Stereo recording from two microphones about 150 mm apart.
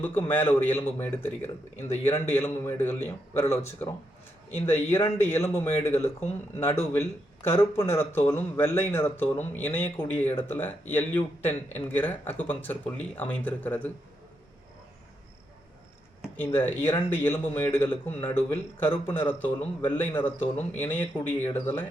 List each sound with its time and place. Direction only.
0.0 s speech: 15° left (ahead or behind)
16.4 s speech: 15° left (ahead or behind)